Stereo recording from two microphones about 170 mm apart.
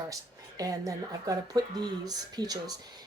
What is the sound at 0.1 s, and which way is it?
Speech, 20° right (ahead or behind).